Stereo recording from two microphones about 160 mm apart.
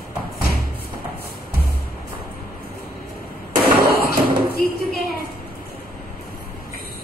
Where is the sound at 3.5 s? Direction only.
70° right (ahead or behind).